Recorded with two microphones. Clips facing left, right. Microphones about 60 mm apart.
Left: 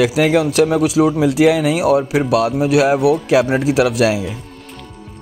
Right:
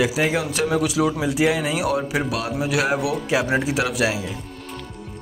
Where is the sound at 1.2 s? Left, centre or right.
Left.